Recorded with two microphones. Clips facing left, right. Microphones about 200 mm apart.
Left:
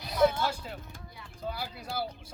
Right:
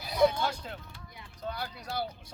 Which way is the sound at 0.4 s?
5° left (ahead or behind).